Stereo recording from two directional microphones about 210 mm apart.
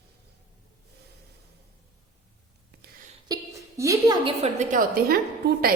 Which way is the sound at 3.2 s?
15° right (ahead or behind).